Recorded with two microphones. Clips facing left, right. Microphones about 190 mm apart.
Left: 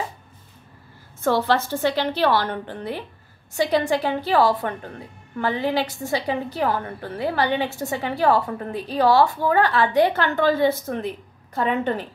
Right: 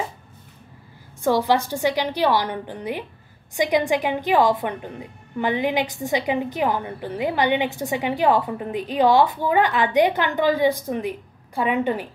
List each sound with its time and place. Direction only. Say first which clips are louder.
1.2 s a woman's voice: right 1 dB; 15° right (ahead or behind)